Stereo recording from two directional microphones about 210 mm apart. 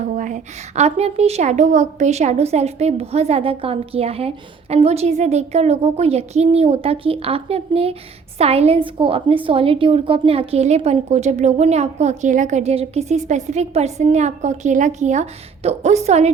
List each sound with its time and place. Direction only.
0.1 s a woman's voice: 35° right (ahead or behind)